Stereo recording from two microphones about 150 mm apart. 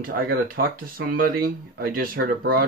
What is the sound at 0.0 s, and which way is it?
Speech, 70° right (ahead or behind).